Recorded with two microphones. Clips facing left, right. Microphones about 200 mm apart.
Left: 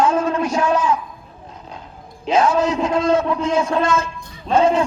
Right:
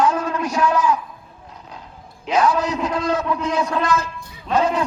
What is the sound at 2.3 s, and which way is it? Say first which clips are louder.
A man's voice: left 2 dB; 25° left (ahead or behind).